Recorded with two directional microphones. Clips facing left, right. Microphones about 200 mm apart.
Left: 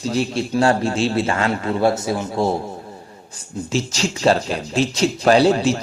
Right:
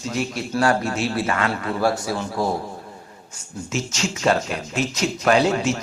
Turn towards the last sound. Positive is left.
turn(degrees=35)  # may be behind; listen again after turning